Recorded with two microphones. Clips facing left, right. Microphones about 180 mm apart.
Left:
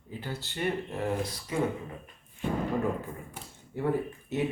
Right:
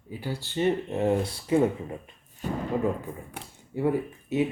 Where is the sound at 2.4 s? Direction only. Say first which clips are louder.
Even; 40° right (ahead or behind).